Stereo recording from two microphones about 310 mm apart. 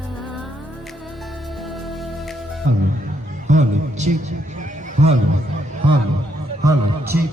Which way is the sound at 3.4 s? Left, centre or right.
Right.